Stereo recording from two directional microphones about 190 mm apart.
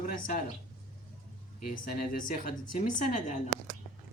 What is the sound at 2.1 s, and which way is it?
Speech, 45° left (ahead or behind).